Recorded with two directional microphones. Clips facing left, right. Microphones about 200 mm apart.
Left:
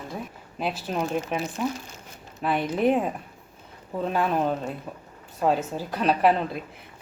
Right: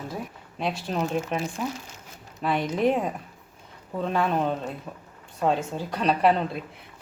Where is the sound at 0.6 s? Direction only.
5° left (ahead or behind).